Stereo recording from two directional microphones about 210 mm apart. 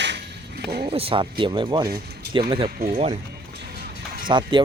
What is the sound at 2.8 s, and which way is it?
Speech, 45° right (ahead or behind).